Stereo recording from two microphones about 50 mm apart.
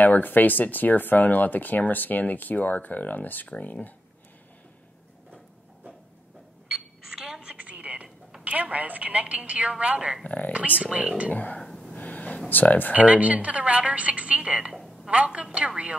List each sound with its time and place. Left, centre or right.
0.0 s speech: left
6.7 s a sound: centre
7.4 s a sound: right
8.5 s a woman's voice: right
10.2 s speech: left
10.8 s a woman's voice: right
11.2 s speech: left
11.6 s gasp: centre
11.9 s a sound: left
12.4 s speech: left
12.9 s a woman's voice: right
14.7 s a sound: centre
15.0 s a woman's voice: right